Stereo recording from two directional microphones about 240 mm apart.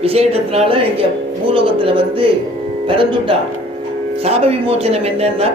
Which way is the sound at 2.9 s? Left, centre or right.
Right.